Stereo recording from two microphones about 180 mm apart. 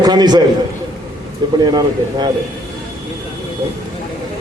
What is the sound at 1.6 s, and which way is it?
Speech, 25° right (ahead or behind).